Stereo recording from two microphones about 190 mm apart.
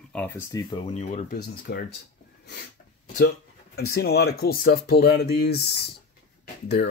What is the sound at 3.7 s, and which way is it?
Speech, 55° left (ahead or behind).